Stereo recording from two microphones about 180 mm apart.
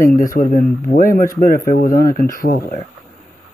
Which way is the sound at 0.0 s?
50° left (ahead or behind).